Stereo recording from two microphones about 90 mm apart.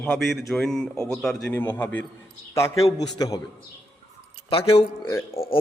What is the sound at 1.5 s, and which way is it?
Speech, 20° left (ahead or behind).